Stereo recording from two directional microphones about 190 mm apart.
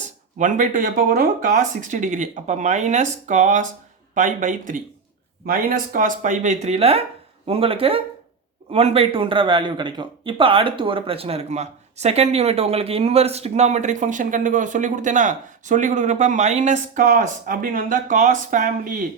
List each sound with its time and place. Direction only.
0.3 s a man's voice: 40° right (ahead or behind)